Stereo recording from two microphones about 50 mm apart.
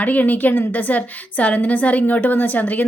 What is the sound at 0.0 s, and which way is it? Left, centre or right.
A woman's voice, left.